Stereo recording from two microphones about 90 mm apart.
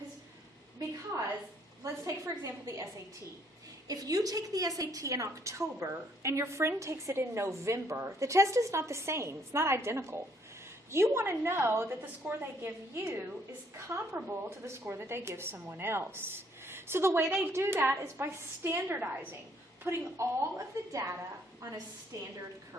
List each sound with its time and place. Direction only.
1.8 s a woman's voice: 40° right (ahead or behind)
3.8 s a woman's voice: 40° right (ahead or behind)